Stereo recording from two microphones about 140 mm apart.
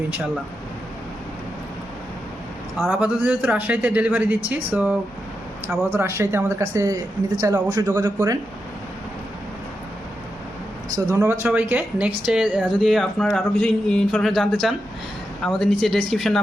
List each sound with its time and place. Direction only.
2.9 s speech: 10° right (ahead or behind)
10.9 s speech: 20° right (ahead or behind); by 16.4 s centre (ahead or behind)